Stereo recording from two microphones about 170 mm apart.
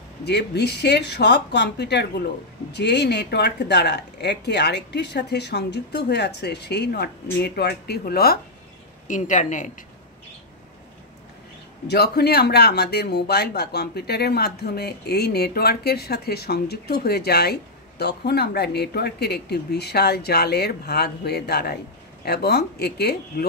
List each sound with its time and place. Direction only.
0.2 s speech: 75° left (ahead or behind)
9.0 s speech: 50° left (ahead or behind)
11.9 s speech: 70° left (ahead or behind)